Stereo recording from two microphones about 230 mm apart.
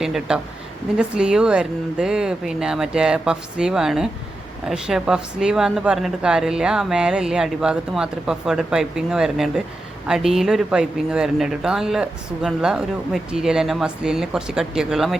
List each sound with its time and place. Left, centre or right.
0.0 s speech: centre